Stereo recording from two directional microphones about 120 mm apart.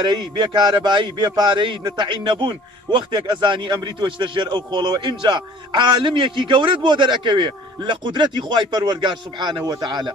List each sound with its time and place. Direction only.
0.0 s a man's voice: 40° right (ahead or behind)